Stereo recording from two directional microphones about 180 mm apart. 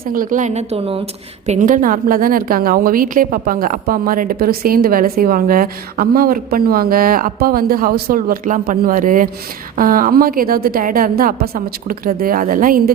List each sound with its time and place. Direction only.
0.0 s a woman's voice: 50° right (ahead or behind); by 1.0 s 30° right (ahead or behind)
1.5 s a woman's voice: 45° right (ahead or behind)